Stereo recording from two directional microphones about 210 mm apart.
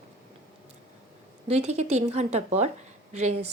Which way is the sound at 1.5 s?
30° right (ahead or behind).